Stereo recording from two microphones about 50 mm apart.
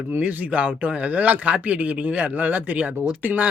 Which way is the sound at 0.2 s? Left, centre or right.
Right.